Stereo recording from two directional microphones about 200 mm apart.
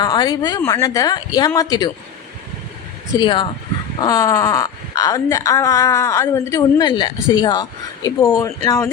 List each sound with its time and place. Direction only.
0.0 s speech: 20° left (ahead or behind)
3.2 s speech: 25° left (ahead or behind)